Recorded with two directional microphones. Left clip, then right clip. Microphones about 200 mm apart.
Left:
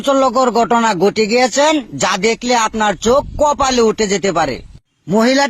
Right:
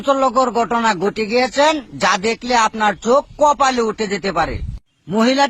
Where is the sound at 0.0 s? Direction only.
40° left (ahead or behind).